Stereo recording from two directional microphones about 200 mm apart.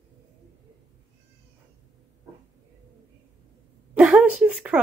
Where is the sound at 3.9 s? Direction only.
5° right (ahead or behind).